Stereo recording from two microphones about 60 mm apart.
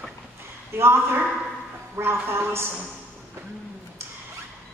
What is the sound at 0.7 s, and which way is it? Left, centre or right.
A woman's voice, right.